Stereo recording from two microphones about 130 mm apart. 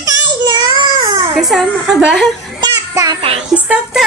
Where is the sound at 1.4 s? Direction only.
Centre (ahead or behind).